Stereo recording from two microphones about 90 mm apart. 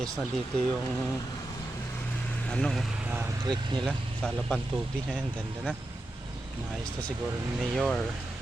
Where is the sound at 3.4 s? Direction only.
55° right (ahead or behind).